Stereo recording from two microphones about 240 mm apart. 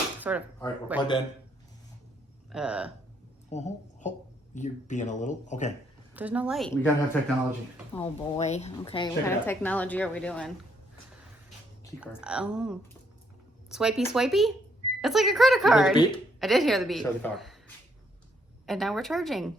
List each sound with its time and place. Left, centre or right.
0.2 s a man's voice: centre
2.5 s speech: centre
3.5 s speech: left
6.1 s speech: centre
7.9 s a woman's voice: left; by 10.5 s centre
12.2 s speech: centre
18.6 s speech: centre